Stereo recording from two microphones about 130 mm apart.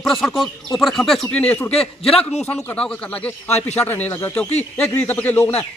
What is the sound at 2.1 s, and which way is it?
Speech, 50° left (ahead or behind).